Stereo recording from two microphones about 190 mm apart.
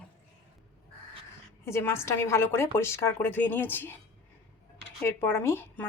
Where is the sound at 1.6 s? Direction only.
15° left (ahead or behind).